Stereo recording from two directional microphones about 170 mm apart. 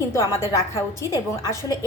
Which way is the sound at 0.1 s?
15° left (ahead or behind).